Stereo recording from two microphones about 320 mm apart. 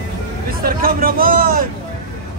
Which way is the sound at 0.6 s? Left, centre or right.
Right.